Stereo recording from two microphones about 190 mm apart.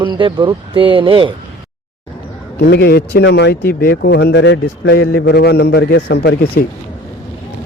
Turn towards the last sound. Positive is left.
turn(degrees=50)  # may be behind; listen again after turning